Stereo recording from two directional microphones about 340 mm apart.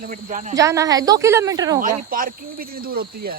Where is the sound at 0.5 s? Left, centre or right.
Centre.